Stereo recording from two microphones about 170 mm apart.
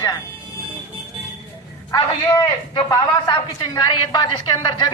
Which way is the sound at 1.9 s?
25° left (ahead or behind).